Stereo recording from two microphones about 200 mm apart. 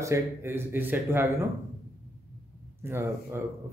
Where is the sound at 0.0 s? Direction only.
15° right (ahead or behind).